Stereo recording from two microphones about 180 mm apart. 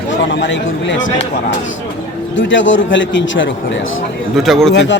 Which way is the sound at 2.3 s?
90° left.